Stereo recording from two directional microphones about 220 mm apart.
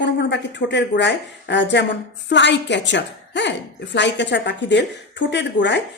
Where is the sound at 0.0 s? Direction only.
55° left (ahead or behind).